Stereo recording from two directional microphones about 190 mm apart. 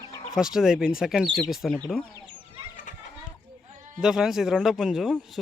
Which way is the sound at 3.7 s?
40° right (ahead or behind).